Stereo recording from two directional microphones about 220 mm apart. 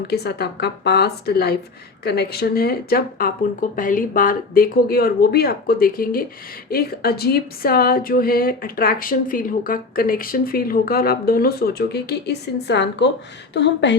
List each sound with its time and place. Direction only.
0.1 s speech: 45° left (ahead or behind)